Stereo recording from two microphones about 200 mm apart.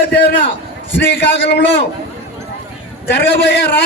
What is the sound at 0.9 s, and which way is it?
Speech, 60° left (ahead or behind).